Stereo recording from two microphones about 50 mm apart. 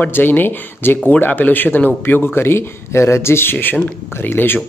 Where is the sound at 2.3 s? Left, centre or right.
Left.